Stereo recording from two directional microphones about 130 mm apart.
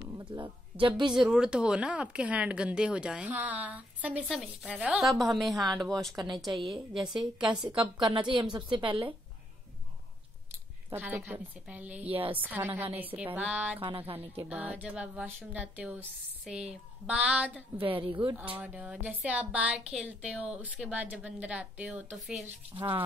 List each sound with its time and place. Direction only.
0.1 s a woman's voice: 35° right (ahead or behind)
1.1 s a woman's voice: 5° right (ahead or behind)
7.8 s a woman's voice: 35° right (ahead or behind)
10.9 s speech: 15° right (ahead or behind)
12.1 s a woman's voice: 45° right (ahead or behind)
12.4 s speech: 15° right (ahead or behind)
13.7 s a woman's voice: 45° right (ahead or behind)
14.5 s speech: 10° right (ahead or behind)
17.7 s a woman's voice: 45° right (ahead or behind)
18.6 s speech: 10° right (ahead or behind)
22.8 s a woman's voice: 40° right (ahead or behind)